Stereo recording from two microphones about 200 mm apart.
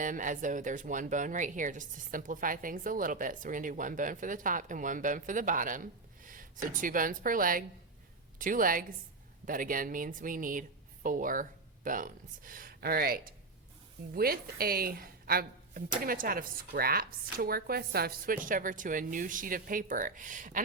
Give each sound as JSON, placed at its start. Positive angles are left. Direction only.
{"t": 0.0, "sound": "a woman's voice", "side_deg": -40}